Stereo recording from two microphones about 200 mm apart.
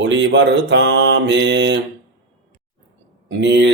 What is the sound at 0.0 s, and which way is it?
Speech, 65° right (ahead or behind).